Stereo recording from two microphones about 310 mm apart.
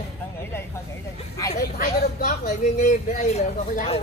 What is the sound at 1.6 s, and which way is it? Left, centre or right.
Speech, left.